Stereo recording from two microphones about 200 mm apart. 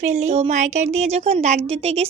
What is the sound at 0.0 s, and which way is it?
A woman's voice, 35° right (ahead or behind).